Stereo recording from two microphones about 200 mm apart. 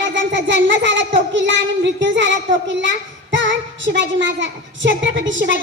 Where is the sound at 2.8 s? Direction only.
65° right (ahead or behind).